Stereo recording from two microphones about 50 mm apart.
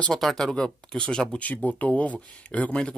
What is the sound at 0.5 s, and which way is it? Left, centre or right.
Speech, centre.